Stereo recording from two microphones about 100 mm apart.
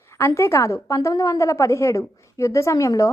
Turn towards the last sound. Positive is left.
turn(degrees=35)  # may be behind; listen again after turning